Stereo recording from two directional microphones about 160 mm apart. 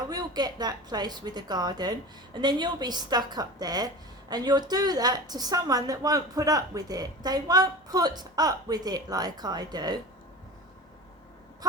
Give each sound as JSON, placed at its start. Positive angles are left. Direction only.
{"t": 0.1, "sound": "a woman's voice", "side_deg": -25}